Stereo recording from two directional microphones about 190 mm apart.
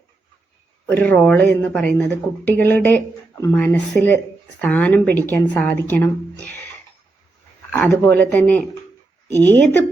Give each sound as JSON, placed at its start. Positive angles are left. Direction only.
{"t": 0.9, "sound": "speech", "side_deg": 10}
{"t": 7.7, "sound": "speech", "side_deg": 10}